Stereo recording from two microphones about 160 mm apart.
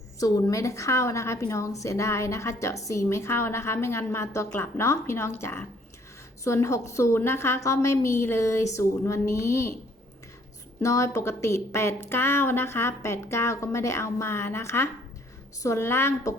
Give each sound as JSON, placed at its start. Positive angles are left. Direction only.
{"t": 0.2, "sound": "a woman's voice", "side_deg": 20}
{"t": 10.8, "sound": "a woman's voice", "side_deg": 20}